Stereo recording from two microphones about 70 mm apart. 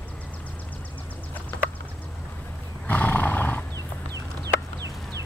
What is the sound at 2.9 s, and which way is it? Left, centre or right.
Roar, left.